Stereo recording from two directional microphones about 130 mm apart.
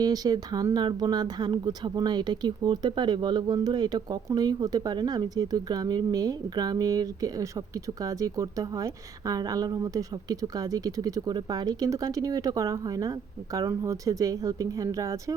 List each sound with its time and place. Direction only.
0.0 s a woman's voice: 30° right (ahead or behind)